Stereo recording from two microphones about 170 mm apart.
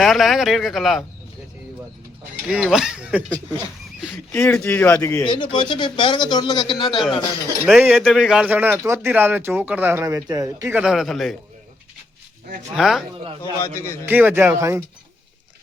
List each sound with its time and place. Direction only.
0.0 s speech: centre (ahead or behind)
2.5 s speech: 5° right (ahead or behind)
4.3 s speech: 10° left (ahead or behind)
5.3 s a man's voice: 30° left (ahead or behind)
7.7 s a man's voice: centre (ahead or behind); by 10.8 s 20° right (ahead or behind)
10.8 s speech: 5° right (ahead or behind)
12.7 s speech: centre (ahead or behind)
13.6 s speech: 15° left (ahead or behind)
14.0 s a man's voice: 10° right (ahead or behind)